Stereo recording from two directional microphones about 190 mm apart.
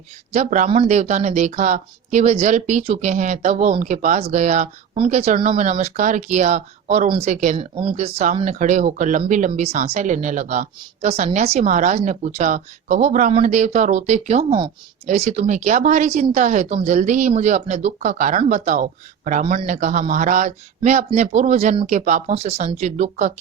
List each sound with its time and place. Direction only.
0.3 s speech: 40° right (ahead or behind)